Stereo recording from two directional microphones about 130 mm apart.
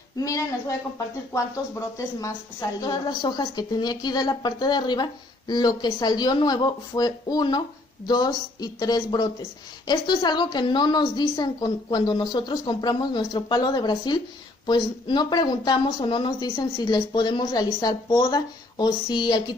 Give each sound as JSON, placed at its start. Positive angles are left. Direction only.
{"t": 0.2, "sound": "speech", "side_deg": 25}